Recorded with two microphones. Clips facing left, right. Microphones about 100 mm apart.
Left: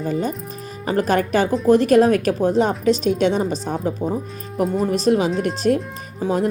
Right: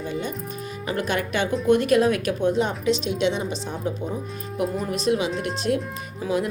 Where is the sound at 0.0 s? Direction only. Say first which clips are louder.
Left 6 dB; 40° left (ahead or behind).